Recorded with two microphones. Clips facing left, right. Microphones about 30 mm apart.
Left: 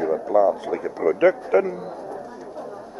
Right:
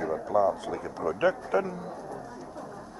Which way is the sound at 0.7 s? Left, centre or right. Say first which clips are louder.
Left 8 dB; left.